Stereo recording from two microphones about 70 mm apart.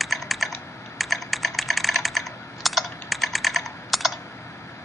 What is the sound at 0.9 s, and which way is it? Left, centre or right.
Computer keyboard, centre.